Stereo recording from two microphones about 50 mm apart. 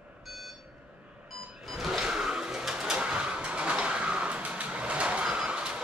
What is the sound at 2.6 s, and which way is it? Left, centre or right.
Vehicle, centre.